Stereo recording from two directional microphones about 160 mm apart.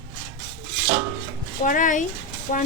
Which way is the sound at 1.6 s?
55° left (ahead or behind).